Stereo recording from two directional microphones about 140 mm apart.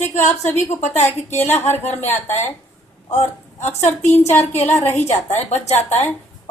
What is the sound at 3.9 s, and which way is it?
Speech, 15° left (ahead or behind).